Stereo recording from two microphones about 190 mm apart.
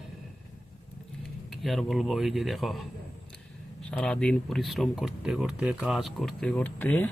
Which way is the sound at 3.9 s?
5° left (ahead or behind).